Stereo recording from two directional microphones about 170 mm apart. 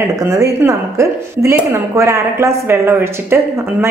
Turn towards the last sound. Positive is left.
turn(degrees=-15)  # may be behind; listen again after turning